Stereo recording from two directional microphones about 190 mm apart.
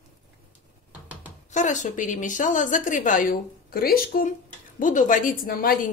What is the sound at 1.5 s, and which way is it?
A woman's voice, 40° left (ahead or behind).